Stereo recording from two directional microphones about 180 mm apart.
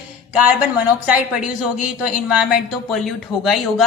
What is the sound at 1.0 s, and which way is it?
Speech, 5° right (ahead or behind).